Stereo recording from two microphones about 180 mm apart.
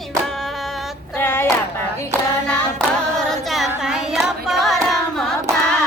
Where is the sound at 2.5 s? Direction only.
5° left (ahead or behind).